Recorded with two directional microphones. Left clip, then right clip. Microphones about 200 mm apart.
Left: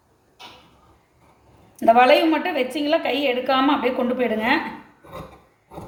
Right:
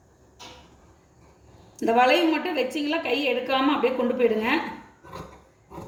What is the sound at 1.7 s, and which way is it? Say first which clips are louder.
A woman's voice: left 6 dB; 45° left (ahead or behind).